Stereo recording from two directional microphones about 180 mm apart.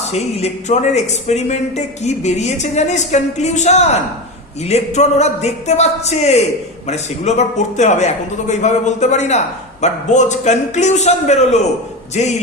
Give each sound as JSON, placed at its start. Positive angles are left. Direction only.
{"t": 0.1, "sound": "speech", "side_deg": 35}